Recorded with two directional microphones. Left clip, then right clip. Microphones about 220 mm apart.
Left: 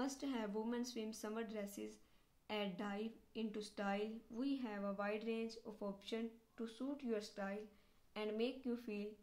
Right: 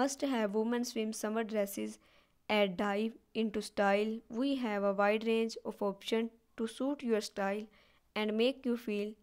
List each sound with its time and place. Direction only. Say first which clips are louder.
0.0 s a woman's voice: right 12 dB; 45° right (ahead or behind)